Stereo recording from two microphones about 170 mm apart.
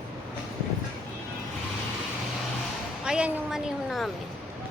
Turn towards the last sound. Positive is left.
turn(degrees=0)  # may be behind; listen again after turning